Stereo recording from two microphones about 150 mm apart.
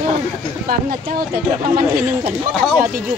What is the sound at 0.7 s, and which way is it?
Speech, 70° right (ahead or behind).